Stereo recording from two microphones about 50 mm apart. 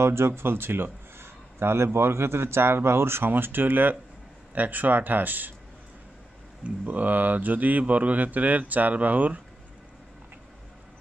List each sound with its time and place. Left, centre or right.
0.0 s speech: right
0.3 s a man's voice: right
3.3 s speech: right
6.6 s speech: right